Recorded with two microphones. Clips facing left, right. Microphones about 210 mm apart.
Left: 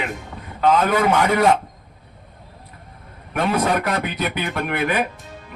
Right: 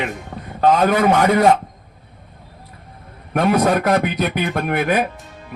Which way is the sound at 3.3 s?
40° right (ahead or behind).